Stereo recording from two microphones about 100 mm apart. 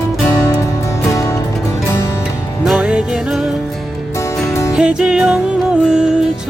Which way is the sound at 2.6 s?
10° right (ahead or behind).